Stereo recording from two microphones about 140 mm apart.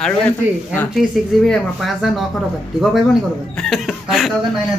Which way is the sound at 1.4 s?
Centre (ahead or behind).